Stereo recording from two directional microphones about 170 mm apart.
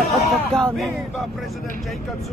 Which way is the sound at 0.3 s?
5° left (ahead or behind).